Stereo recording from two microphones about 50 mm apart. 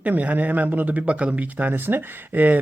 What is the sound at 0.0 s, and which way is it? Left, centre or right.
Speech, right.